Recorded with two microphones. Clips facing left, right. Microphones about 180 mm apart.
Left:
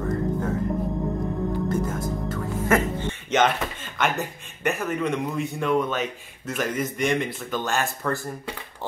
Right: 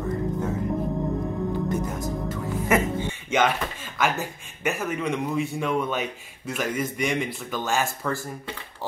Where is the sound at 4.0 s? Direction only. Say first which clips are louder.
Even; centre (ahead or behind).